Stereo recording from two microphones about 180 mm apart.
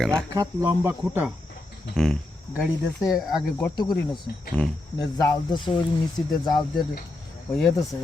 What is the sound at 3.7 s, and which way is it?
Speech, 25° left (ahead or behind).